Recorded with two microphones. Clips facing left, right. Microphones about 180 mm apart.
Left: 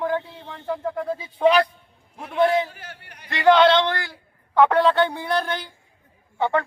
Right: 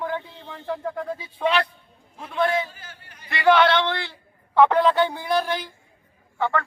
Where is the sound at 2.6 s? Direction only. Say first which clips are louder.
Left 4 dB; 70° left (ahead or behind).